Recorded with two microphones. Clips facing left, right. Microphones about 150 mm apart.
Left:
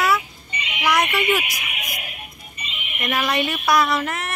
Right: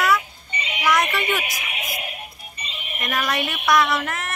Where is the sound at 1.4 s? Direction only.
30° right (ahead or behind).